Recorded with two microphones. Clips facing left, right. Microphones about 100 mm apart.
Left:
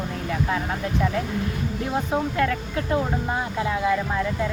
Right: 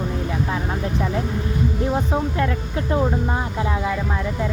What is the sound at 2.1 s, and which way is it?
Speech, 25° right (ahead or behind).